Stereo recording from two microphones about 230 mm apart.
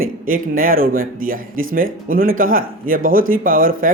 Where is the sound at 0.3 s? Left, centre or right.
Right.